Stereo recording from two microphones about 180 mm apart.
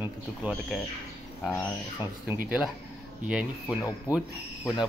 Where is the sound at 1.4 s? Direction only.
5° left (ahead or behind).